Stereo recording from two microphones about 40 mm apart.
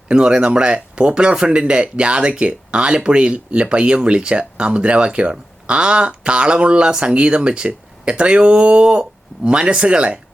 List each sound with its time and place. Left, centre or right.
0.1 s speech: right